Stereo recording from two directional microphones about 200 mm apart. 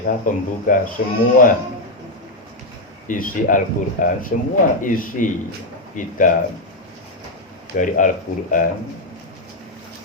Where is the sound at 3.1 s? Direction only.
40° left (ahead or behind).